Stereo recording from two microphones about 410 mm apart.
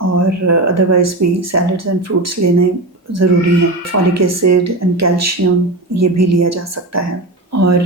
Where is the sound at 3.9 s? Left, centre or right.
Right.